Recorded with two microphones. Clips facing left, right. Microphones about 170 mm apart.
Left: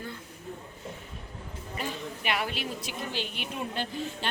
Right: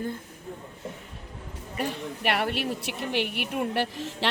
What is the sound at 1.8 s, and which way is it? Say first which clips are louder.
A woman's voice: right 6 dB; 65° right (ahead or behind).